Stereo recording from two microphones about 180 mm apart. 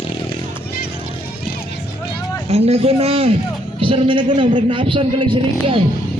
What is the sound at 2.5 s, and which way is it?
A man's voice, 35° right (ahead or behind).